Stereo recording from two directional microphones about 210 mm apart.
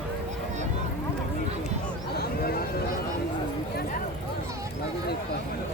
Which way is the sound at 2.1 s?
45° left (ahead or behind).